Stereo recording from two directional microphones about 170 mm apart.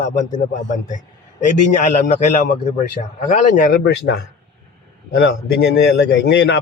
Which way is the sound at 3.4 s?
55° left (ahead or behind).